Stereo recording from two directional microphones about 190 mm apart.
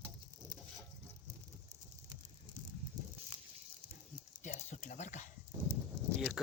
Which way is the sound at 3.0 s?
20° right (ahead or behind).